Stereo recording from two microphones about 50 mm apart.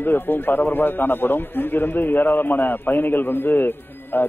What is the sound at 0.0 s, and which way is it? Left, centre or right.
A man's voice, left.